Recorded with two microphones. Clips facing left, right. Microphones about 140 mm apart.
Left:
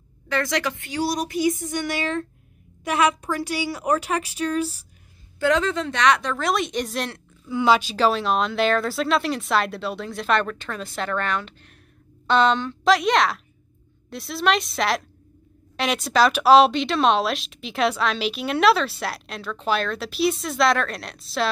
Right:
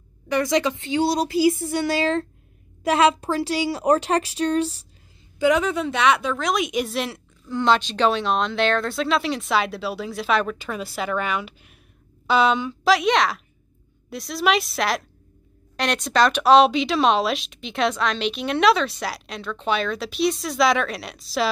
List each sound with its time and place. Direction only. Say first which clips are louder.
0.3 s a woman's voice: right 4 dB; 15° right (ahead or behind); by 4.6 s 35° right (ahead or behind)
5.4 s speech: right 2 dB; 10° right (ahead or behind)